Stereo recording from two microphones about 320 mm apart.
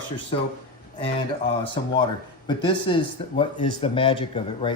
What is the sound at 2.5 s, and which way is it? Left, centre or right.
Speech, centre.